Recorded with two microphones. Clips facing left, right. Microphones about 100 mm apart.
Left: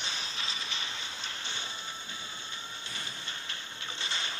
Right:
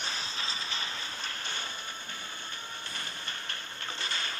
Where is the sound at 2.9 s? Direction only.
50° right (ahead or behind).